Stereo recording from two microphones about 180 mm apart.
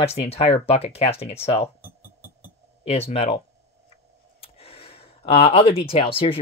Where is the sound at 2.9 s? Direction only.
35° left (ahead or behind).